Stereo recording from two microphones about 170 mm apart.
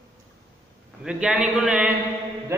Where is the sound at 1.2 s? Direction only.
5° right (ahead or behind).